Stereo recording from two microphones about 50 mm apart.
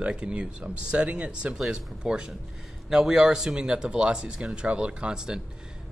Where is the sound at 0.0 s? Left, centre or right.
Centre.